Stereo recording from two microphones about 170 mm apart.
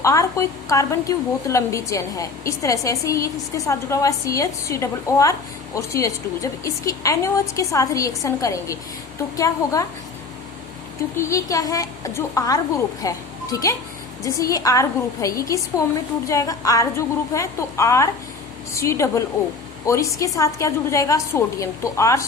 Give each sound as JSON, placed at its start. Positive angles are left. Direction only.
{"t": 0.0, "sound": "a woman's voice", "side_deg": 20}
{"t": 11.2, "sound": "a woman's voice", "side_deg": 20}